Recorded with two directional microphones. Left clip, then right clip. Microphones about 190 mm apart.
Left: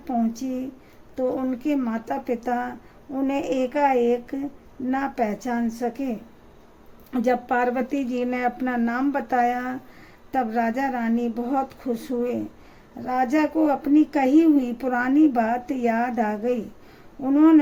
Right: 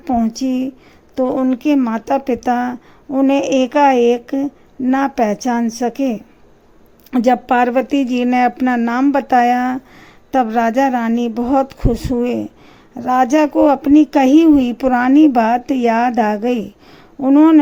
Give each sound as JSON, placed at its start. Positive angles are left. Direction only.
{"t": 0.0, "sound": "speech", "side_deg": -40}
{"t": 7.1, "sound": "speech", "side_deg": -35}